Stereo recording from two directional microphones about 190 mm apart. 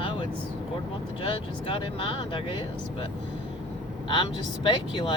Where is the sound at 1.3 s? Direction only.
25° left (ahead or behind).